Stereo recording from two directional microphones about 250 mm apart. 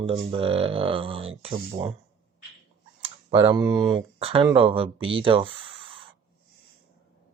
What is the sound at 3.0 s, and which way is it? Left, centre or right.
Speech, right.